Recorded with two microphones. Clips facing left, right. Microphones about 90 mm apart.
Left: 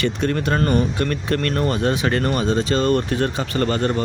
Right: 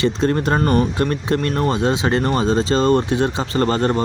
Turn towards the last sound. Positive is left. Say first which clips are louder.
# right 3 dB
turn(degrees=-30)  # may be behind; listen again after turning